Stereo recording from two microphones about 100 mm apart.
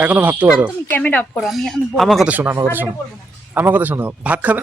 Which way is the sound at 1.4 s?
Centre (ahead or behind).